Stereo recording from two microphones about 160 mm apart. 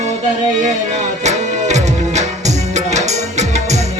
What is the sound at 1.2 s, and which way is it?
Music, 45° right (ahead or behind).